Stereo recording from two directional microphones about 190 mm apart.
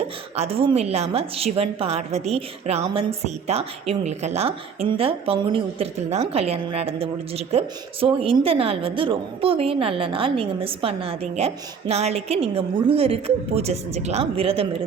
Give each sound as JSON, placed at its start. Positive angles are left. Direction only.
{"t": 0.3, "sound": "a woman's voice", "side_deg": -30}